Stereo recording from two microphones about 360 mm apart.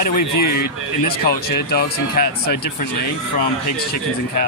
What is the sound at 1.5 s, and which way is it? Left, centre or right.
Speech, left.